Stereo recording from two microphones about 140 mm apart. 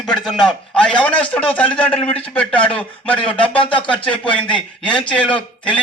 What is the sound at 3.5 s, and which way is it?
Speech, 35° left (ahead or behind).